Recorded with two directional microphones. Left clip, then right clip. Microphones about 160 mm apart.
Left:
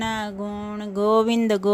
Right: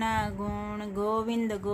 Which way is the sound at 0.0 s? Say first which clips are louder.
Left 2 dB; 25° left (ahead or behind).